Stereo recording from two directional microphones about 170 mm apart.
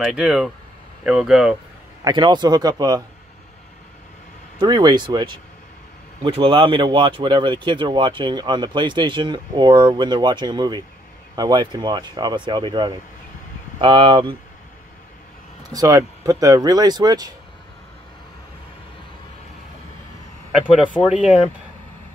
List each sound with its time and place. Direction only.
0.0 s speech: 5° right (ahead or behind)
2.0 s speech: 25° right (ahead or behind)
4.6 s speech: 25° right (ahead or behind)
15.7 s speech: 20° right (ahead or behind)
20.5 s speech: 5° right (ahead or behind)